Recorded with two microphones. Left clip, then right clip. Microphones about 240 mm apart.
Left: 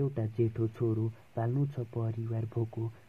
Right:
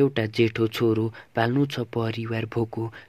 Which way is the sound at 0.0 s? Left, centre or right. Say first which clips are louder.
Right 11 dB; right.